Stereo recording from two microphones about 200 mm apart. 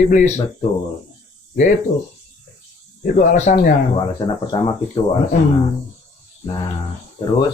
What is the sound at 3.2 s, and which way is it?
Speech, 40° left (ahead or behind).